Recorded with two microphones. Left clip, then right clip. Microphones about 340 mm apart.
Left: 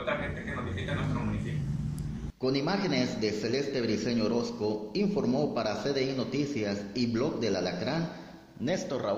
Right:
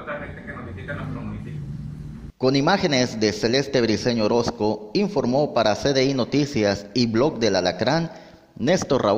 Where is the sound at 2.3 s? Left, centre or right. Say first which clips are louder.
Right 10 dB; right.